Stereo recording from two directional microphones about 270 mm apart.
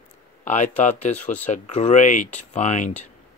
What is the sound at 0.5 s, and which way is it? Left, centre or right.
Speech, left.